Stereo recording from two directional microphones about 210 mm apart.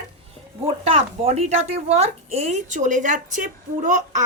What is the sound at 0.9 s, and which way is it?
Speech, 30° right (ahead or behind).